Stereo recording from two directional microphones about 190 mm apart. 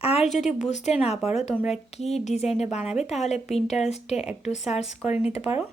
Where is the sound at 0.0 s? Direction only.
30° left (ahead or behind).